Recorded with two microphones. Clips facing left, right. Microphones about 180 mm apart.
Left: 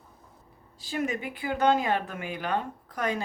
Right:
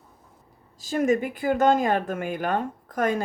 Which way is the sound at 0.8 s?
45° right (ahead or behind).